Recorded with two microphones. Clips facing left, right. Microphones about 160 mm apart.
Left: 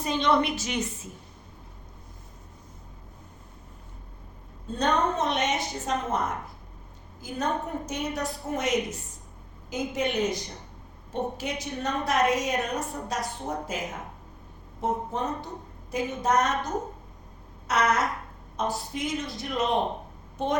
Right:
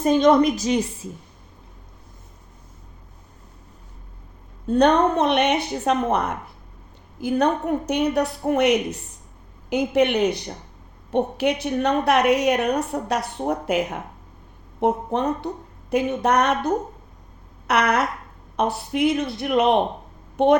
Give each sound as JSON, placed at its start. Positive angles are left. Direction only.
{"t": 0.0, "sound": "a woman's voice", "side_deg": -45}
{"t": 4.7, "sound": "a woman's voice", "side_deg": -65}